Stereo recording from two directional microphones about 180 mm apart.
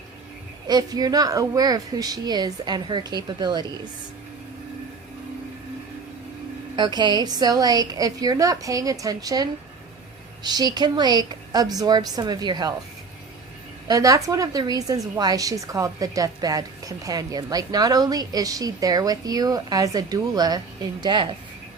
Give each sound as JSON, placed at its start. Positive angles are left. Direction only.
{"t": 0.7, "sound": "a woman's voice", "side_deg": -20}
{"t": 6.7, "sound": "a woman's voice", "side_deg": -25}
{"t": 13.8, "sound": "a woman's voice", "side_deg": -20}